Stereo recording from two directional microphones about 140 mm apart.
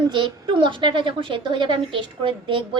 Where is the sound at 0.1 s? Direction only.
35° right (ahead or behind).